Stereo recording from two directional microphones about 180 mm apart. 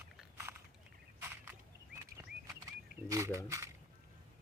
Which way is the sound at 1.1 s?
10° right (ahead or behind).